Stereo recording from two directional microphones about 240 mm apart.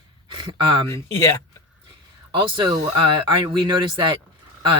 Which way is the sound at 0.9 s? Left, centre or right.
Centre.